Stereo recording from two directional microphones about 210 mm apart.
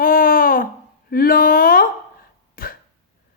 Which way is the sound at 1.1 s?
45° left (ahead or behind).